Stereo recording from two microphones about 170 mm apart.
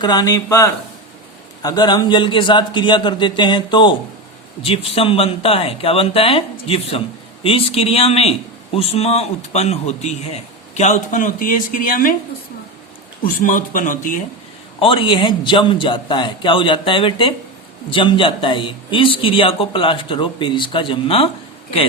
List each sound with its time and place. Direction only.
0.0 s a man's voice: 25° left (ahead or behind); by 12.1 s 55° left (ahead or behind)
13.2 s speech: 50° left (ahead or behind)
14.8 s a man's voice: 30° left (ahead or behind)